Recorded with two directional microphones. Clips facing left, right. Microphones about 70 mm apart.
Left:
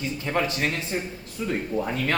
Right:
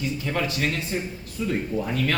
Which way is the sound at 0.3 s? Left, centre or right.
Left.